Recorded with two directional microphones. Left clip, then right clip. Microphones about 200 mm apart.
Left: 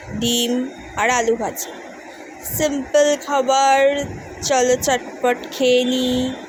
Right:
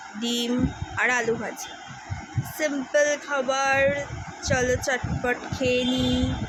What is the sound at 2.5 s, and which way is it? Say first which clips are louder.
Speech: left 6 dB; 15° left (ahead or behind).